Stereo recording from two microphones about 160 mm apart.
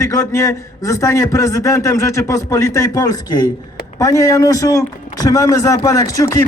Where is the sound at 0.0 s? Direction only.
15° left (ahead or behind).